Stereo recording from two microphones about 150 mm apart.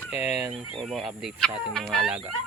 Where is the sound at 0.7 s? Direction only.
Centre (ahead or behind).